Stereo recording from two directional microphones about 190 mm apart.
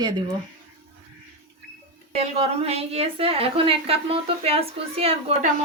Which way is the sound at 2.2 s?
30° right (ahead or behind).